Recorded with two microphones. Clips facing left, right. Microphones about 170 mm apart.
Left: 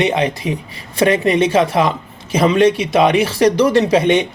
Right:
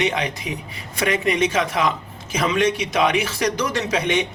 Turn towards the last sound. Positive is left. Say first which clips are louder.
# left 8 dB
turn(degrees=30)  # may be behind; listen again after turning